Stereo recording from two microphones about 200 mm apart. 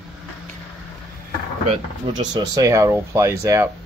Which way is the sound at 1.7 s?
25° right (ahead or behind).